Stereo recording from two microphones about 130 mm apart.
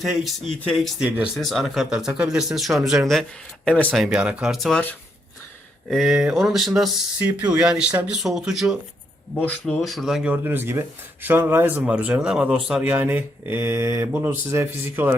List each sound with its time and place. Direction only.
0.0 s speech: centre (ahead or behind)
3.7 s speech: 10° left (ahead or behind)
4.0 s speech: 10° right (ahead or behind)
5.9 s speech: centre (ahead or behind)
7.2 s speech: 15° right (ahead or behind)
9.3 s speech: 10° left (ahead or behind)
9.8 s speech: centre (ahead or behind); by 15.1 s 15° right (ahead or behind)